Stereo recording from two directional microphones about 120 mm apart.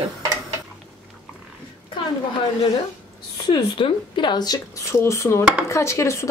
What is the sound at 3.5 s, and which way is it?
Speech, 40° left (ahead or behind).